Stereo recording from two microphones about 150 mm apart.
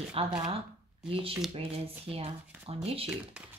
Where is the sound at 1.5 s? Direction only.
40° right (ahead or behind).